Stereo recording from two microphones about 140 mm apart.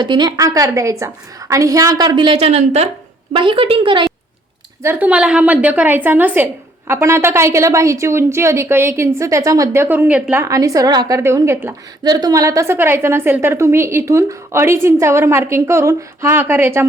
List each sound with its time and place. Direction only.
0.0 s a woman's voice: 30° right (ahead or behind)
4.8 s a woman's voice: 15° right (ahead or behind)
10.4 s a woman's voice: 25° right (ahead or behind)